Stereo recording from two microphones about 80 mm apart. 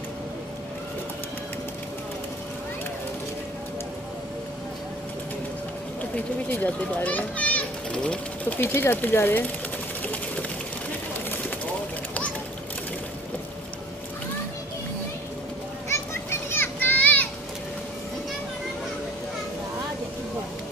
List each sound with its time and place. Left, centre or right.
6.5 s a child's voice: centre
8.5 s speech: left
15.9 s children playing: left